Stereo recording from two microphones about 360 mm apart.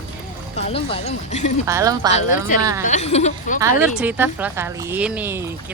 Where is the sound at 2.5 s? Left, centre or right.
Left.